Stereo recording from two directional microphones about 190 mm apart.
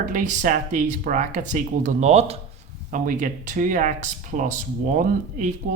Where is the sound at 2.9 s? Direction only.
45° right (ahead or behind).